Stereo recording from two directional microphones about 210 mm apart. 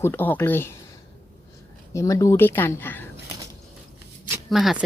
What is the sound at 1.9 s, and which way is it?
Speech, 15° left (ahead or behind).